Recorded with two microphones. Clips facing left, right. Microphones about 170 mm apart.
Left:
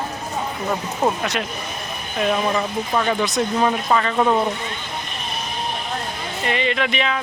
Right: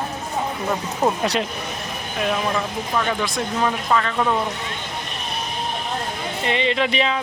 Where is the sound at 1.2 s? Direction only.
25° right (ahead or behind).